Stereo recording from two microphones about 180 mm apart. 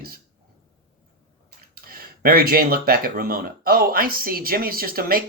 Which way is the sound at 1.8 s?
55° right (ahead or behind).